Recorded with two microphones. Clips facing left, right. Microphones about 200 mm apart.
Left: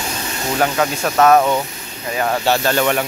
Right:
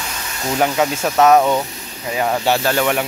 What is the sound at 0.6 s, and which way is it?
Speech, 5° right (ahead or behind).